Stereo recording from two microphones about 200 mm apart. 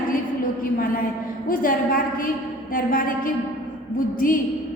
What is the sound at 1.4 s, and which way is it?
A woman's voice, 45° left (ahead or behind).